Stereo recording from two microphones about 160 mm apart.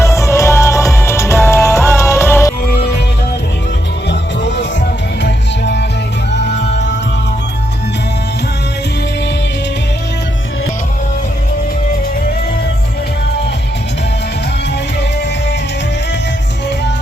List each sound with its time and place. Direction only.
0.0 s music: 15° left (ahead or behind)
4.1 s music: 90° left